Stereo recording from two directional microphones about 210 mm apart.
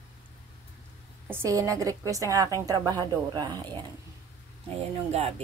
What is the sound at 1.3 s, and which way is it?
Music, 15° right (ahead or behind).